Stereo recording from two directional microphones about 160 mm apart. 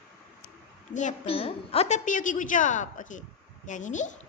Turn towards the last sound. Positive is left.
turn(degrees=50)  # may be behind; listen again after turning